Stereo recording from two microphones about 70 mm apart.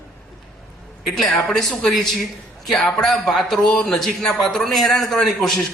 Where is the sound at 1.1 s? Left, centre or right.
Centre.